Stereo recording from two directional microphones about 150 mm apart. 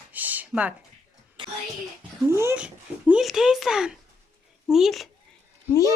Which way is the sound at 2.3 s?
20° right (ahead or behind).